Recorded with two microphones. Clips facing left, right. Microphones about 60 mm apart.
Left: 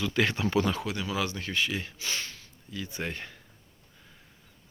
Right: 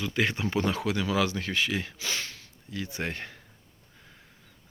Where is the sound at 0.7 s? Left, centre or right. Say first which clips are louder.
Right 3 dB; right.